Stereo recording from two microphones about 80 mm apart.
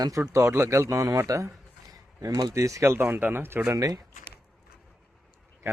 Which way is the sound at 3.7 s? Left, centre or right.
Right.